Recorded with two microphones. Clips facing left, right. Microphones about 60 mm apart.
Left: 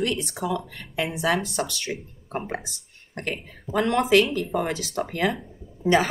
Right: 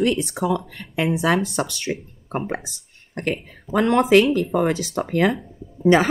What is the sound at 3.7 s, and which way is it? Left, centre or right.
Speech, right.